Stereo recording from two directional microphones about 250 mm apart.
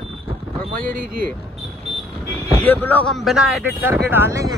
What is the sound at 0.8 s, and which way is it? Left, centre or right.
Speech, right.